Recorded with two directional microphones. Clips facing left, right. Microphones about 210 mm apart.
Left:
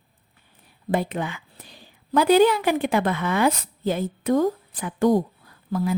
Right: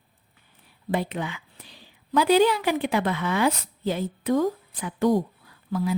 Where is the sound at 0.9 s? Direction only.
50° left (ahead or behind).